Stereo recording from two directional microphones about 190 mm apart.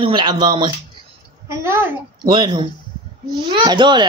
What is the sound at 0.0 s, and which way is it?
A man's voice, 25° right (ahead or behind).